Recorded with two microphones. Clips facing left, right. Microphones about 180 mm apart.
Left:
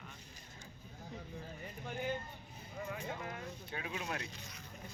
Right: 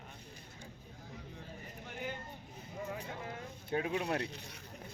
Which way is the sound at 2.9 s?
30° right (ahead or behind).